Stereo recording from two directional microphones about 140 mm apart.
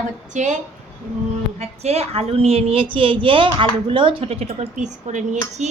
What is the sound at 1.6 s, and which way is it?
A woman's voice, 50° right (ahead or behind).